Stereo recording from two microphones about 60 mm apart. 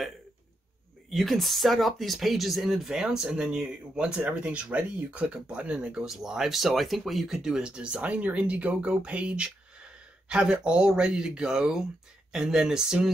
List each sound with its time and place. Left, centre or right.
1.1 s speech: centre
6.0 s speech: centre